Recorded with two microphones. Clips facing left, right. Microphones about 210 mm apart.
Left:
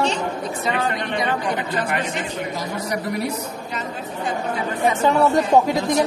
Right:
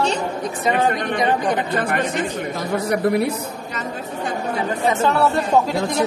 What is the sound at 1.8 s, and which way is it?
Speech, 50° right (ahead or behind).